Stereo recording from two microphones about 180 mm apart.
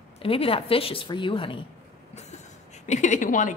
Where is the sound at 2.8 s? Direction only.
45° left (ahead or behind).